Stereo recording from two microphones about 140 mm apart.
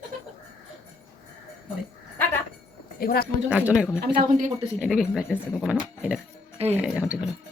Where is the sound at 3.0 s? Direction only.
90° left.